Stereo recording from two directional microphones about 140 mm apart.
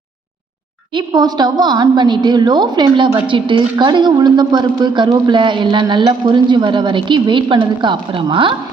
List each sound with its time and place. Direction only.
0.9 s a woman's voice: 30° right (ahead or behind)